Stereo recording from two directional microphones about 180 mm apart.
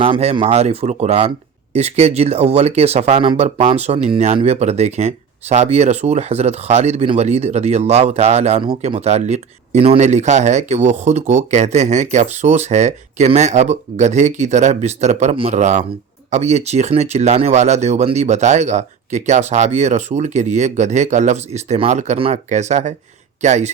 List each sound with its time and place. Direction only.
0.0 s speech: 35° right (ahead or behind)